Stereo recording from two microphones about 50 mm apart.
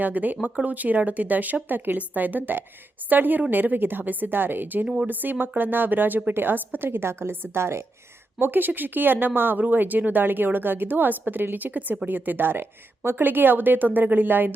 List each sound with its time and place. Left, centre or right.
0.0 s a woman's voice: right
8.4 s speech: right